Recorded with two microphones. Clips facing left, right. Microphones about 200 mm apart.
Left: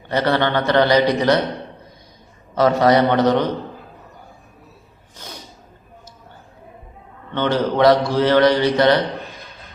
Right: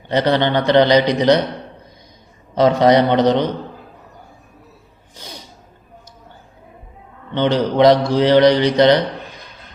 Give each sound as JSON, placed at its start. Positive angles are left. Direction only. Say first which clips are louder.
{"t": 0.1, "sound": "a man's voice", "louder": "right 2 dB", "side_deg": -20}
{"t": 2.6, "sound": "mantra", "louder": "right 2 dB", "side_deg": -20}
{"t": 7.3, "sound": "mantra", "louder": "right 3 dB", "side_deg": -15}